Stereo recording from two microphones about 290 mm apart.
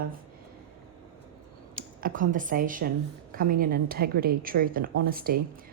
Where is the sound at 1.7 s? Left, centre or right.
Right.